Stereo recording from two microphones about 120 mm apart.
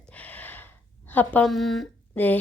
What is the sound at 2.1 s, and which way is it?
Speech, 15° left (ahead or behind).